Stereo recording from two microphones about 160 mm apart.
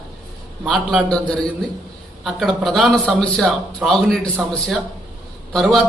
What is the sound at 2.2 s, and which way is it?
A man's voice, centre (ahead or behind).